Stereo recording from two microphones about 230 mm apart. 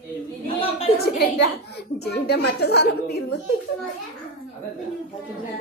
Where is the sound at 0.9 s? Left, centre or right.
Left.